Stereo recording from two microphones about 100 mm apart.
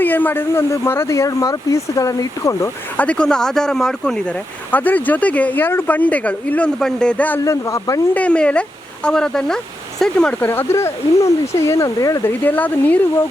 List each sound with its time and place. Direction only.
0.0 s speech: 20° left (ahead or behind); by 2.6 s 35° left (ahead or behind)
3.0 s speech: 10° left (ahead or behind)
4.7 s speech: 15° left (ahead or behind)
7.4 s speech: 30° left (ahead or behind)
8.1 s speech: 10° left (ahead or behind)
10.4 s speech: 20° left (ahead or behind)
12.2 s speech: 20° left (ahead or behind)